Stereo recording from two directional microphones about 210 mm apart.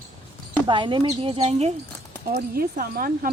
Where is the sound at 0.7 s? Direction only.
20° right (ahead or behind).